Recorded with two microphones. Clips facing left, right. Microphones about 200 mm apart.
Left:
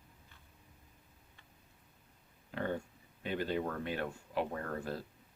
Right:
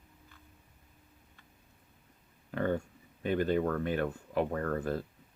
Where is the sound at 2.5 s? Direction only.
50° right (ahead or behind).